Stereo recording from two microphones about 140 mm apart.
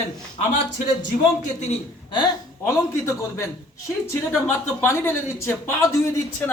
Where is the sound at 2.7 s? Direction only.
20° left (ahead or behind).